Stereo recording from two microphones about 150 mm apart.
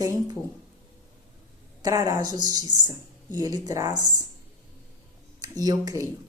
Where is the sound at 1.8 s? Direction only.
25° right (ahead or behind).